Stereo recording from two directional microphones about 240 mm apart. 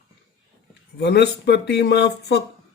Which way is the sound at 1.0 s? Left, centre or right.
Left.